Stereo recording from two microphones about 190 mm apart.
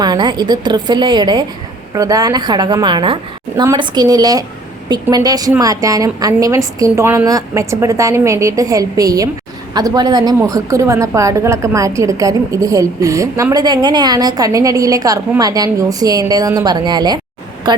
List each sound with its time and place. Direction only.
0.0 s a woman's voice: 20° right (ahead or behind)